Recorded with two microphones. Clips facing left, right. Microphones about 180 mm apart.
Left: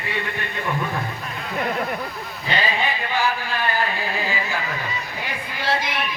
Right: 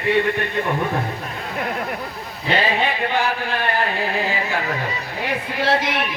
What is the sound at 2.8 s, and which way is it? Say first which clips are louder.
Music: right 2 dB; 65° right (ahead or behind).